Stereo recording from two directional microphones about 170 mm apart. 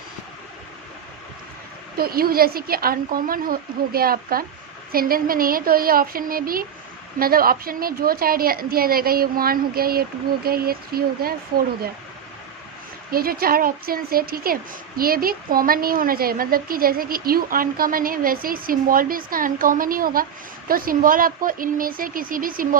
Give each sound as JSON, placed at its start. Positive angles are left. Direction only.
{"t": 2.0, "sound": "speech", "side_deg": -60}
{"t": 13.1, "sound": "speech", "side_deg": -60}